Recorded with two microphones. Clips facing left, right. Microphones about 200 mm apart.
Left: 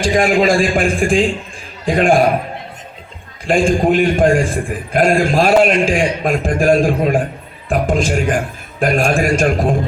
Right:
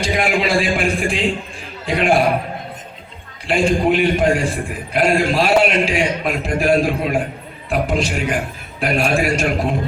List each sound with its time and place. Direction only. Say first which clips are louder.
0.0 s a man's voice: left 6 dB; 45° left (ahead or behind)
3.4 s a man's voice: left 3 dB; 45° left (ahead or behind)